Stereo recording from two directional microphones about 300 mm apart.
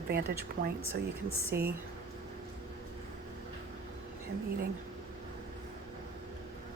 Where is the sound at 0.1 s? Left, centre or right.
Right.